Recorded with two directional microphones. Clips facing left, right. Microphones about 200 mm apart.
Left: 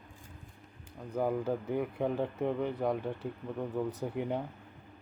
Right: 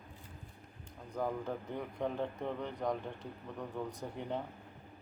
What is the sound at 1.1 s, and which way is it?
Speech, 10° left (ahead or behind).